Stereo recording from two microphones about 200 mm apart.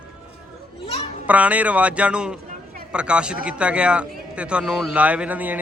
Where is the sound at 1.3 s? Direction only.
5° right (ahead or behind).